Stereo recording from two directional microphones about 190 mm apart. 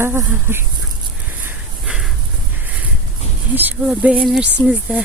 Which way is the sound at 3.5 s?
10° right (ahead or behind).